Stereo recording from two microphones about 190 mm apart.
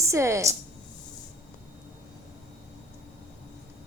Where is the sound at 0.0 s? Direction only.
15° right (ahead or behind).